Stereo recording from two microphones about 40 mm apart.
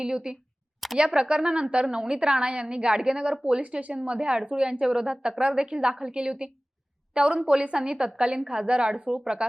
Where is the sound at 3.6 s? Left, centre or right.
Right.